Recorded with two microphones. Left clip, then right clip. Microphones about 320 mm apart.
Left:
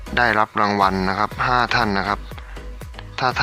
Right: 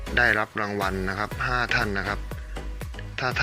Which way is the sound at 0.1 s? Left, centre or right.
Centre.